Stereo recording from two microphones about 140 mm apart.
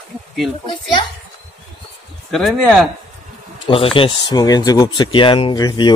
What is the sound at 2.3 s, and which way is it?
Speech, centre (ahead or behind).